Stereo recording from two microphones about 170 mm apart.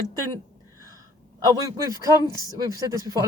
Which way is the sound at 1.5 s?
20° right (ahead or behind).